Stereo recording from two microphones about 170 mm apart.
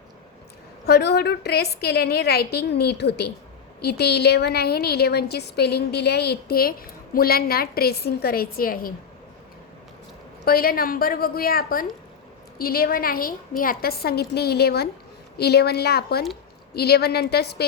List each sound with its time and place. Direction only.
0.9 s a woman's voice: 80° left; by 8.9 s 60° left (ahead or behind)
10.4 s a woman's voice: 60° left (ahead or behind)